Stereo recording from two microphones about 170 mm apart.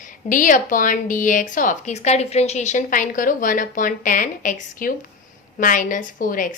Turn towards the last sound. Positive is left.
turn(degrees=55)  # may be behind; listen again after turning